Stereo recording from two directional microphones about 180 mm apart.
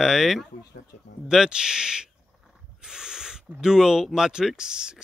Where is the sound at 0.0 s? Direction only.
Centre (ahead or behind).